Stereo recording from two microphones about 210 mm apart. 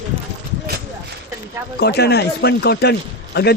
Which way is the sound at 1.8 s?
50° left (ahead or behind).